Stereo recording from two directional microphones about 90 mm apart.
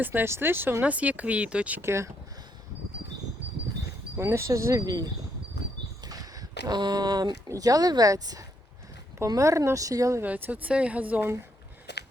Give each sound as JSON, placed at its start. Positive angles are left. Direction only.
{"t": 0.0, "sound": "speech", "side_deg": -20}
{"t": 1.8, "sound": "speech", "side_deg": -30}
{"t": 4.2, "sound": "speech", "side_deg": -30}
{"t": 10.2, "sound": "speech", "side_deg": -20}